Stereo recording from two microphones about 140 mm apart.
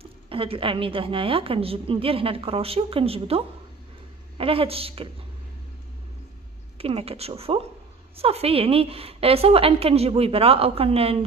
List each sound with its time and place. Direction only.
0.0 s a woman's voice: 40° right (ahead or behind)
6.8 s a woman's voice: 45° right (ahead or behind)